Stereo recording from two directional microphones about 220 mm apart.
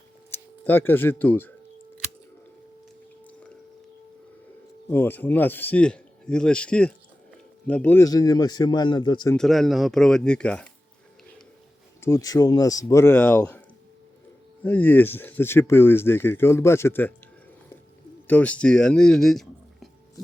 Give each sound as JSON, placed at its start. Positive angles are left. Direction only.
{"t": 0.3, "sound": "speech", "side_deg": 10}
{"t": 4.9, "sound": "speech", "side_deg": 10}
{"t": 9.3, "sound": "speech", "side_deg": 0}
{"t": 12.0, "sound": "speech", "side_deg": 15}
{"t": 14.6, "sound": "speech", "side_deg": 10}
{"t": 18.3, "sound": "speech", "side_deg": 5}